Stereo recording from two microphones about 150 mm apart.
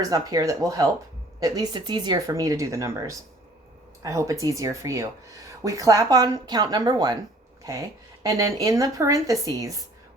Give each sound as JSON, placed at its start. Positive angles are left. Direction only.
{"t": 0.0, "sound": "speech", "side_deg": -25}